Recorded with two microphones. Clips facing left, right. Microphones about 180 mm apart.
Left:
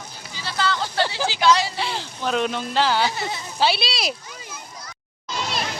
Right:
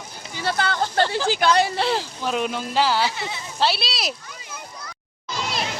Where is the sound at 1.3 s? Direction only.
55° right (ahead or behind).